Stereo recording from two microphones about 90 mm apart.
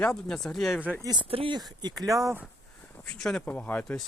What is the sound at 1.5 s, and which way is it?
Speech, 50° right (ahead or behind).